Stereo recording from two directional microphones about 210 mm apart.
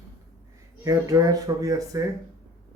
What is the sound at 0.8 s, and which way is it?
Speech, 15° right (ahead or behind).